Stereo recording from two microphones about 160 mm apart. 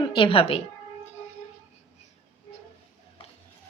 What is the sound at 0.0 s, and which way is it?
Speech, 35° left (ahead or behind).